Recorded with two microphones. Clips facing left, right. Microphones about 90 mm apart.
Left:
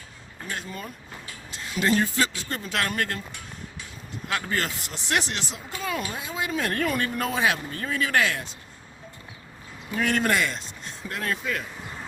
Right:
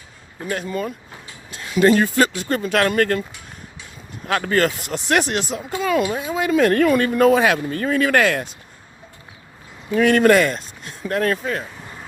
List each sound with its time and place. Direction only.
0.4 s speech: 65° right (ahead or behind)
4.3 s speech: 60° right (ahead or behind)
5.8 s speech: 90° right; by 8.5 s 60° right (ahead or behind)
10.0 s speech: 65° right (ahead or behind)